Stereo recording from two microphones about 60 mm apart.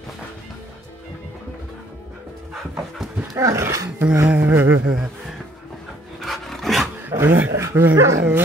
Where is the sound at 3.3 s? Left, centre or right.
Right.